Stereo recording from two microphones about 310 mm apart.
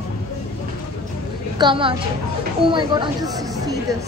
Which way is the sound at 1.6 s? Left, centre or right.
Centre.